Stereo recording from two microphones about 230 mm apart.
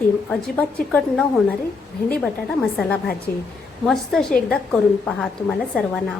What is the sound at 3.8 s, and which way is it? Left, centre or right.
A woman's voice, centre.